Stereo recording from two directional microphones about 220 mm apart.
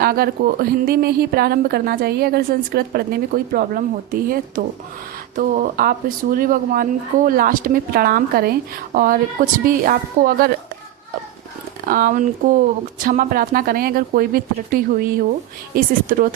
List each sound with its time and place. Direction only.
0.0 s a woman's voice: 45° right (ahead or behind)
11.9 s speech: 40° right (ahead or behind)